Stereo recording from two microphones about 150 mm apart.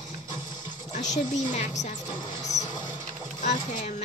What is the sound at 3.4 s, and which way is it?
Speech, 60° left (ahead or behind).